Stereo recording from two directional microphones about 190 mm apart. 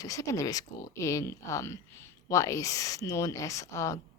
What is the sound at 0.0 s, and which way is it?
Speech, 15° left (ahead or behind).